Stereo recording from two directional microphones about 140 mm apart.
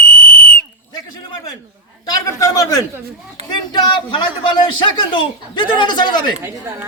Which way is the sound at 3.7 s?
35° left (ahead or behind).